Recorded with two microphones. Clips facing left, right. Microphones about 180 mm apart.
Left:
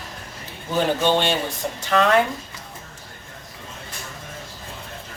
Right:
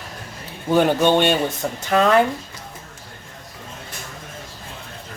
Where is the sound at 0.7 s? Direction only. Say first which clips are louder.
Right 4 dB; 55° right (ahead or behind).